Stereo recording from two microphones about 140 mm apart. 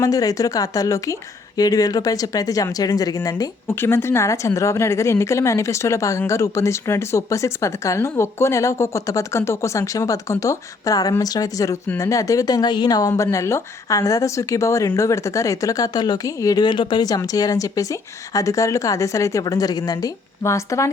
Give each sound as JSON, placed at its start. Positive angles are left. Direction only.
{"t": 0.0, "sound": "speech", "side_deg": 25}